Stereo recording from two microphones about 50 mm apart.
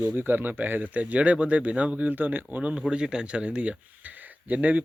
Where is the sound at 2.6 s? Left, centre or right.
Right.